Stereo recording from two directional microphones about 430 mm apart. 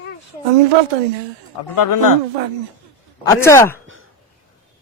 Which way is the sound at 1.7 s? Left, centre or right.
Left.